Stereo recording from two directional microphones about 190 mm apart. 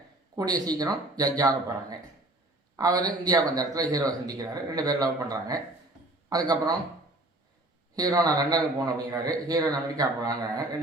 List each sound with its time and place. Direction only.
0.3 s speech: 20° right (ahead or behind)
7.9 s speech: 20° right (ahead or behind)